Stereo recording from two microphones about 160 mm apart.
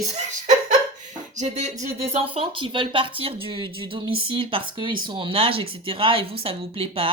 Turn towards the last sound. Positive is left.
turn(degrees=-35)  # may be behind; listen again after turning